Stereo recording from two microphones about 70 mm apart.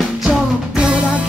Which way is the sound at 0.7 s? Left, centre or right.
Centre.